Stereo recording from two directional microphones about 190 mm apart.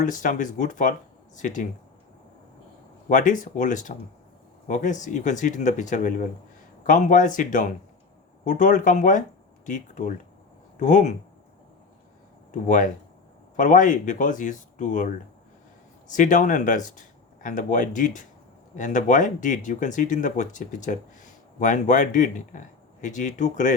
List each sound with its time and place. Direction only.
0.0 s speech: 45° left (ahead or behind)
3.1 s speech: 45° left (ahead or behind)
12.5 s speech: 40° left (ahead or behind)